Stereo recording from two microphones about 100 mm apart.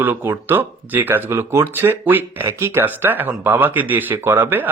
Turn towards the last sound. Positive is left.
turn(degrees=-20)  # may be behind; listen again after turning